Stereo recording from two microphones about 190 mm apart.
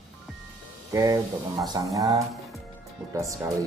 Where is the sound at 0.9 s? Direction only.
15° right (ahead or behind).